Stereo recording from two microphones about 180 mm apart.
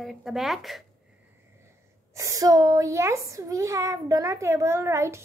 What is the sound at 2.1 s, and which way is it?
A woman's voice, 20° right (ahead or behind).